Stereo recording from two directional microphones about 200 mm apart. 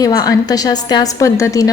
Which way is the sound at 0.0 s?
15° left (ahead or behind).